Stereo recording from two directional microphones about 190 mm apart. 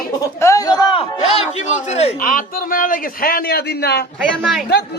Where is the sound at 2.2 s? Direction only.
45° left (ahead or behind).